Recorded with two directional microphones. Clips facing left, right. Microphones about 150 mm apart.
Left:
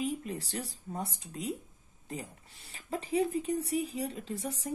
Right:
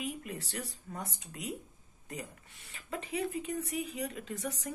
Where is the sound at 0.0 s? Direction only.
30° left (ahead or behind).